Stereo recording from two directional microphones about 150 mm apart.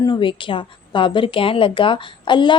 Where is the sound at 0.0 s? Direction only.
30° left (ahead or behind).